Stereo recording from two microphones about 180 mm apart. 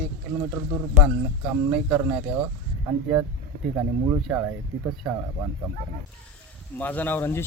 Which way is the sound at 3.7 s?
20° right (ahead or behind).